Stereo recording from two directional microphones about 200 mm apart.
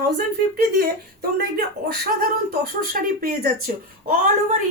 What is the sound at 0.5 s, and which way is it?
Speech, 50° right (ahead or behind).